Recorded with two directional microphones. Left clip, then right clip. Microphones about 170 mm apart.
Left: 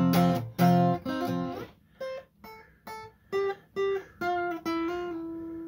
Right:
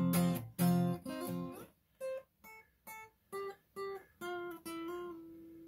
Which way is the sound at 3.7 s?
30° right (ahead or behind).